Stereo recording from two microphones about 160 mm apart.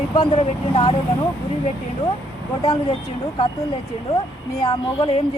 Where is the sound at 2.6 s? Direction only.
25° left (ahead or behind).